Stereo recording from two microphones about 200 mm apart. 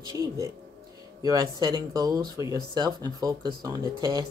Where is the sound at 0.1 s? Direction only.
15° right (ahead or behind).